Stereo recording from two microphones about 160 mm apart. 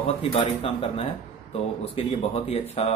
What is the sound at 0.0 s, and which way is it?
Speech, 35° left (ahead or behind).